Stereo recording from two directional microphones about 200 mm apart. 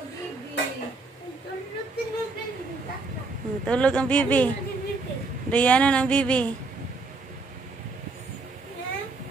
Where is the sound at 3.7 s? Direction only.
5° left (ahead or behind).